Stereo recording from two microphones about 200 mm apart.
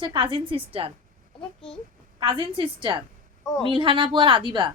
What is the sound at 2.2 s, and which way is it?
A woman's voice, 25° right (ahead or behind).